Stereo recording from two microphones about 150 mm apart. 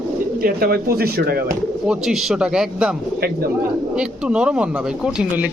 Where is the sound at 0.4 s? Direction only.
85° right.